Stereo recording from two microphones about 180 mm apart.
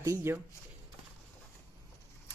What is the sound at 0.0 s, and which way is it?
Speech, 15° right (ahead or behind).